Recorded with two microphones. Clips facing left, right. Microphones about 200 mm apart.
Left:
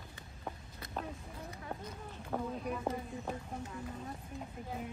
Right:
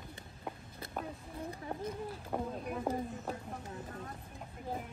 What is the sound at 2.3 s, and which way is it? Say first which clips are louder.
Speech: even; 10° right (ahead or behind).